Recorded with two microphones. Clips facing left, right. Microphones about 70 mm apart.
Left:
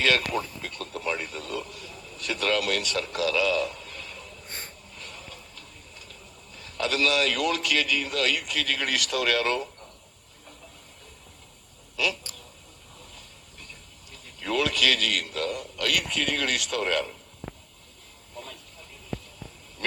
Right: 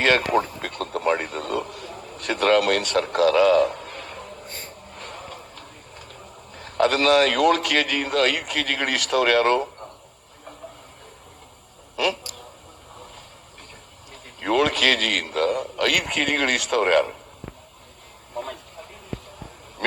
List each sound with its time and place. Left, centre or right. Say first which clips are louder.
0.0 s radio: right 6 dB; right
4.9 s a sound: right 7 dB; right
11.9 s speech: right 5 dB; right
13.0 s vehicle: right 6 dB; right
14.1 s a man's voice: right 7 dB; right
18.3 s vehicle: right 10 dB; right